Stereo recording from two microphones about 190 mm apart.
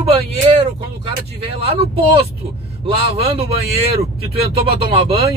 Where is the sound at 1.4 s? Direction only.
30° right (ahead or behind).